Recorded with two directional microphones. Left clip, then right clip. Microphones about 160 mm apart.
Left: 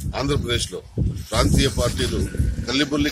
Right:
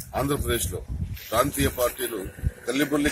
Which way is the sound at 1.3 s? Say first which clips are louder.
Left 2 dB; 25° left (ahead or behind).